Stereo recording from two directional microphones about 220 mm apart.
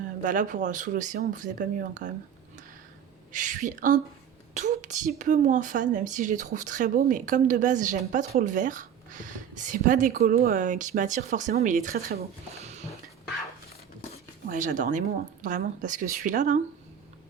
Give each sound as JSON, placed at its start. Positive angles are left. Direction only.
{"t": 0.2, "sound": "a woman's voice", "side_deg": -35}
{"t": 3.3, "sound": "a woman's voice", "side_deg": -35}
{"t": 14.4, "sound": "a woman's voice", "side_deg": -35}